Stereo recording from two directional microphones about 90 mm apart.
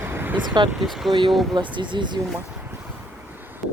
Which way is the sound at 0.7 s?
Centre (ahead or behind).